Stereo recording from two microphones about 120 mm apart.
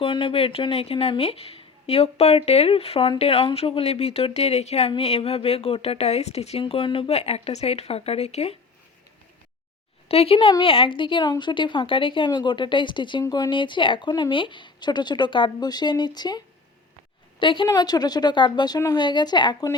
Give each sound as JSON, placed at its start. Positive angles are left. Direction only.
{"t": 0.0, "sound": "a woman's voice", "side_deg": 45}
{"t": 10.1, "sound": "a woman's voice", "side_deg": 55}
{"t": 13.2, "sound": "speech", "side_deg": 30}
{"t": 13.5, "sound": "speech", "side_deg": 40}
{"t": 17.4, "sound": "a woman's voice", "side_deg": 45}
{"t": 17.7, "sound": "speech", "side_deg": 35}